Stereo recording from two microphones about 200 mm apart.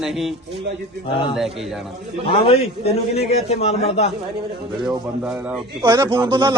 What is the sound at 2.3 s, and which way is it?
A man's voice, 30° left (ahead or behind).